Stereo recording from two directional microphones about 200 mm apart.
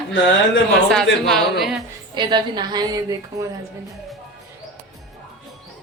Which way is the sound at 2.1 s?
20° right (ahead or behind).